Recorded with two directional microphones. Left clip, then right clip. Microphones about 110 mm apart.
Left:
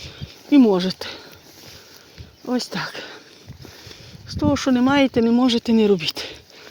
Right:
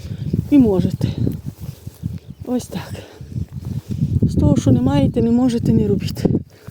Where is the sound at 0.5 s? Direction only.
60° right (ahead or behind); by 1.2 s 80° right.